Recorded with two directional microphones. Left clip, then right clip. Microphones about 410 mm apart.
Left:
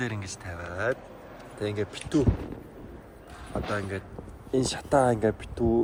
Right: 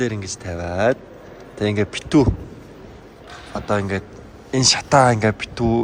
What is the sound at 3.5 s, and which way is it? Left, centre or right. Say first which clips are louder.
Speech: right 9 dB; right.